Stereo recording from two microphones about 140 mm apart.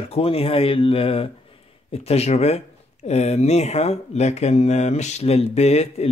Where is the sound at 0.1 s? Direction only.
45° left (ahead or behind).